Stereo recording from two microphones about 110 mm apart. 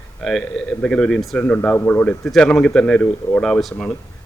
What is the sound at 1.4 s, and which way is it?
Speech, 15° left (ahead or behind).